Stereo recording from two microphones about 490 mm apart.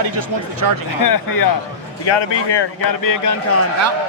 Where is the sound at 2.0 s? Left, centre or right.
Left.